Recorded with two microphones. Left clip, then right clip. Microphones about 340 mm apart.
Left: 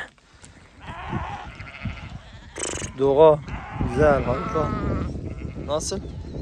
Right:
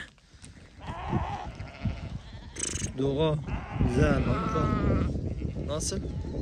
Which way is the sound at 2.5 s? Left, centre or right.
Centre.